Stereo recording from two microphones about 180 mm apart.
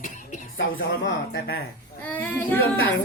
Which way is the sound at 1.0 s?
60° left (ahead or behind).